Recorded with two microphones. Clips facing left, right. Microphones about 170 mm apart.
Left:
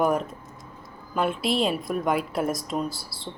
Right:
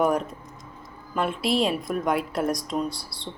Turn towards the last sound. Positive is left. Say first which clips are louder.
# right 1 dB
turn(degrees=0)  # may be behind; listen again after turning